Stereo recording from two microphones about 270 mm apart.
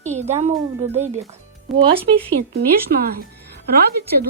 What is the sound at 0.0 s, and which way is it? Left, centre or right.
Speech, right.